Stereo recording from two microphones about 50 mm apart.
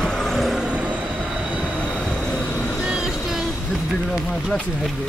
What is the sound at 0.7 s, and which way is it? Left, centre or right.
Train, right.